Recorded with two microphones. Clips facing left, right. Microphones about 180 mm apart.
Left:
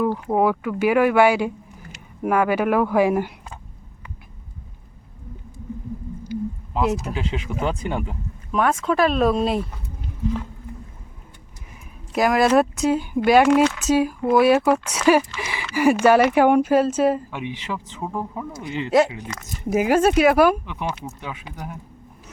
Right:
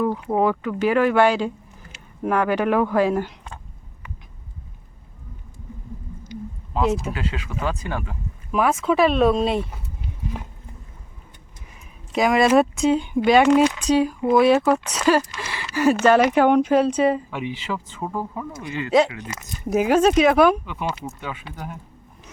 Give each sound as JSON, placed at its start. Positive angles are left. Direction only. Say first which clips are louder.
{"t": 0.2, "sound": "speech", "louder": "left 1 dB", "side_deg": 5}
{"t": 6.3, "sound": "a sound", "louder": "left 7 dB", "side_deg": 5}
{"t": 6.7, "sound": "speech", "louder": "right 1 dB", "side_deg": 5}
{"t": 7.3, "sound": "speech", "louder": "left 3 dB", "side_deg": 25}
{"t": 8.5, "sound": "speech", "louder": "right 1 dB", "side_deg": -5}
{"t": 12.1, "sound": "speech", "louder": "even", "side_deg": 0}